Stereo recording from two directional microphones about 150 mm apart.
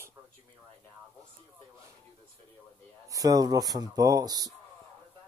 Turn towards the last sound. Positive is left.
turn(degrees=-25)  # may be behind; listen again after turning